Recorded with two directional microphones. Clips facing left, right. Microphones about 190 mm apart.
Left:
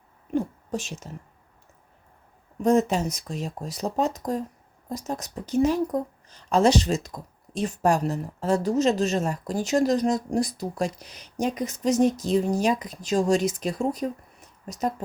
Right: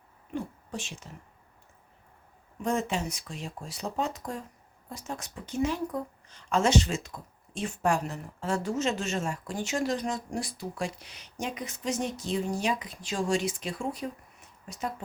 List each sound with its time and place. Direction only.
0.3 s a woman's voice: 40° left (ahead or behind)
2.6 s a woman's voice: 40° left (ahead or behind)